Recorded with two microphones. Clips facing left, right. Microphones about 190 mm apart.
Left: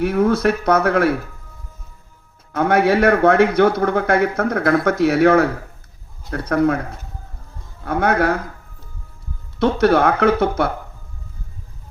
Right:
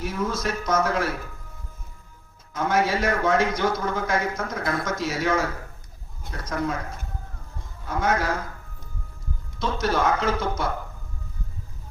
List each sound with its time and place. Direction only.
0.0 s a man's voice: 60° left (ahead or behind)
2.5 s a man's voice: 60° left (ahead or behind)
7.9 s a man's voice: 60° left (ahead or behind)
9.6 s a man's voice: 60° left (ahead or behind)